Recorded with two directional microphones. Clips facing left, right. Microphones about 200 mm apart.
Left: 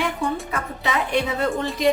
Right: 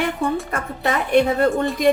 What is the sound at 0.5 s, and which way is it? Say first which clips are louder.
Music: right 3 dB; 50° right (ahead or behind).